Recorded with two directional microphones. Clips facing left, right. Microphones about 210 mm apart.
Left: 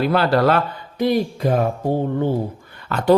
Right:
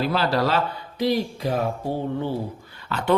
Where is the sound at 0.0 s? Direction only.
55° left (ahead or behind).